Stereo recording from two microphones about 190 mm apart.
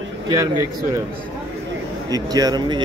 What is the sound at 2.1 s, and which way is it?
Speech, 20° right (ahead or behind).